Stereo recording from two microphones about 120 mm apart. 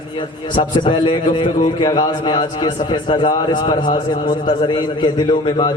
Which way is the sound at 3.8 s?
90° left.